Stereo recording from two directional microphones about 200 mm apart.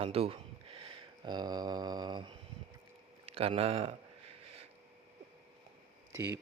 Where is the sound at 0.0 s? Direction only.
30° right (ahead or behind).